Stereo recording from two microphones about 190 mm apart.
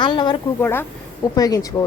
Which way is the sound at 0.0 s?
25° left (ahead or behind).